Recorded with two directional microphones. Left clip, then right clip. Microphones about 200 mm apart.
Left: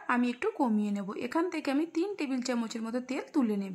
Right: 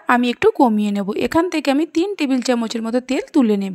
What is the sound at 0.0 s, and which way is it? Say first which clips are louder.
A woman's voice: right 15 dB; 40° right (ahead or behind).